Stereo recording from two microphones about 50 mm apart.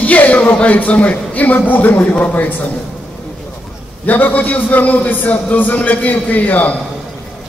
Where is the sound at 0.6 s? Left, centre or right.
Left.